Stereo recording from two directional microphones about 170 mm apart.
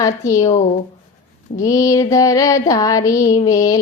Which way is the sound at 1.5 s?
20° left (ahead or behind).